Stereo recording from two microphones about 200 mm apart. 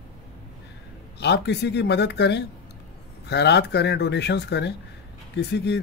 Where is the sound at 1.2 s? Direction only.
60° left (ahead or behind).